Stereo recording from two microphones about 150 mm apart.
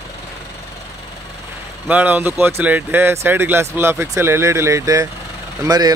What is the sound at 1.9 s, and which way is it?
Speech, 10° right (ahead or behind).